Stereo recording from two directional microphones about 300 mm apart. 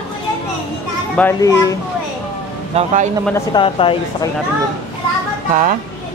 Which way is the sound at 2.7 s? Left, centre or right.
Right.